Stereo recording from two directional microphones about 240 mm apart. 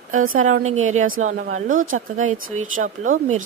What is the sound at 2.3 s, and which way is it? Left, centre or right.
Speech, right.